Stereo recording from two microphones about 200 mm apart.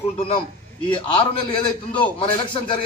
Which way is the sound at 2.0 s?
25° left (ahead or behind).